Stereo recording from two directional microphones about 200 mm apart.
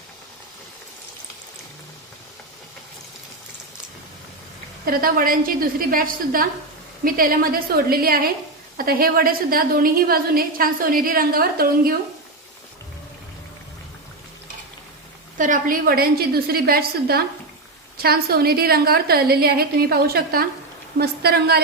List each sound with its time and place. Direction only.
4.9 s a woman's voice: 45° right (ahead or behind)
15.4 s a woman's voice: 40° right (ahead or behind)